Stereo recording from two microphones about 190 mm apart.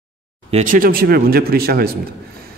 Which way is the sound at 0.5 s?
40° right (ahead or behind).